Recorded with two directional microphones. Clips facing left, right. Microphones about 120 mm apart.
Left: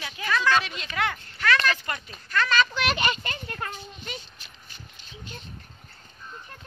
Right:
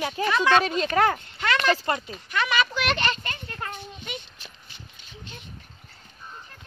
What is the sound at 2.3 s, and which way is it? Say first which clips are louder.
Speech: left 1 dB; 15° right (ahead or behind).